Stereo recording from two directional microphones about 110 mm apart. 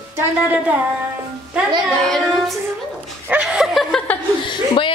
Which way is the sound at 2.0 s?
Centre (ahead or behind).